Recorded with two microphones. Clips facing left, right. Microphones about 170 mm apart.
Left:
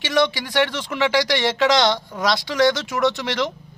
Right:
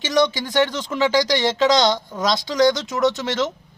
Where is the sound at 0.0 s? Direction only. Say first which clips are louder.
Right 1 dB; 45° right (ahead or behind).